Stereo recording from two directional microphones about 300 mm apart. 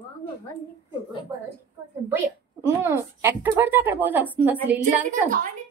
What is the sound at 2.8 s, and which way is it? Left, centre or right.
Speech, centre.